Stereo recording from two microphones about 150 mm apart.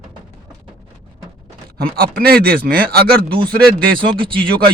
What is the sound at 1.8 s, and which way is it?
Speech, 90° right.